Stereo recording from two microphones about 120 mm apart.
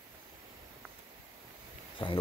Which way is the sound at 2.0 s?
45° left (ahead or behind).